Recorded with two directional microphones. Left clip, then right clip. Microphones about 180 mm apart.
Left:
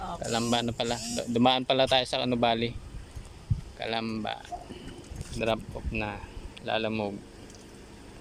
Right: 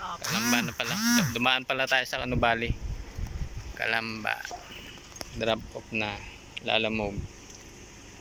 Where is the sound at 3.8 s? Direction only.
20° left (ahead or behind).